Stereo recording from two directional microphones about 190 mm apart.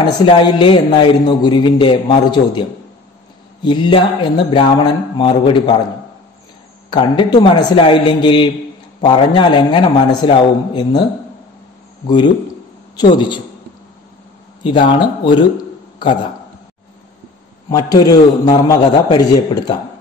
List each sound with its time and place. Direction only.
0.0 s a man's voice: 25° left (ahead or behind)
3.6 s a man's voice: 25° left (ahead or behind)
6.9 s a man's voice: 25° left (ahead or behind)
12.9 s a man's voice: 25° left (ahead or behind)
14.6 s a man's voice: 25° left (ahead or behind)
17.6 s a man's voice: 20° left (ahead or behind)